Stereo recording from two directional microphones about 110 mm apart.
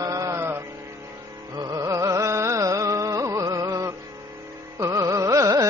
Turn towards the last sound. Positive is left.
turn(degrees=-30)  # may be behind; listen again after turning